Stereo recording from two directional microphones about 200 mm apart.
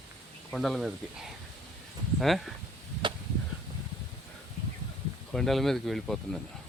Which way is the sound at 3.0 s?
25° right (ahead or behind).